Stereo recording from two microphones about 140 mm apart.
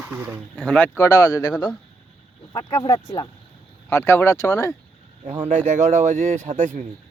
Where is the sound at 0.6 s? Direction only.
10° left (ahead or behind); by 1.7 s 25° left (ahead or behind).